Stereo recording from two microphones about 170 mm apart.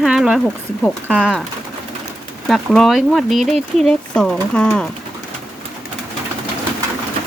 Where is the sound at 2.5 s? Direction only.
Centre (ahead or behind).